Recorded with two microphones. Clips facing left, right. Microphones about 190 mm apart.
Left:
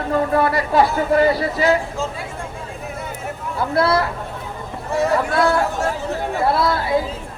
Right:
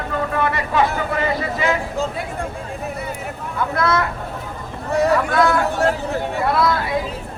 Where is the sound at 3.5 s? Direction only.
30° left (ahead or behind).